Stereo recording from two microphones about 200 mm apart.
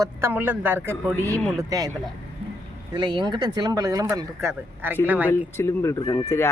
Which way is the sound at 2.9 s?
25° right (ahead or behind).